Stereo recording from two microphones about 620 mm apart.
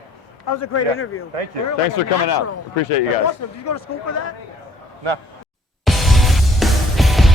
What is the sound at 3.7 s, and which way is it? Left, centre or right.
Speech, left.